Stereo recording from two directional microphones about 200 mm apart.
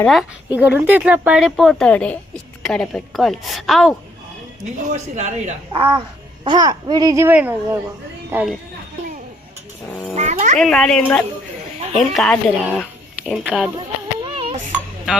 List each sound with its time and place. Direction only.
0.0 s speech: centre (ahead or behind)
4.8 s a child's voice: 35° right (ahead or behind); by 7.8 s 10° right (ahead or behind)
9.9 s a sound: 5° left (ahead or behind)
10.2 s music: 35° right (ahead or behind)
10.6 s speech: 5° left (ahead or behind)
14.3 s a sound: 30° right (ahead or behind)